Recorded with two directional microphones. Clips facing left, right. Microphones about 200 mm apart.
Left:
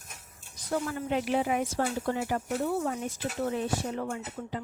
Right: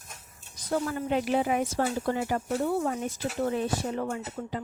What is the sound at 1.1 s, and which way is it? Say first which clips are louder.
A woman's voice: right 2 dB; 40° right (ahead or behind).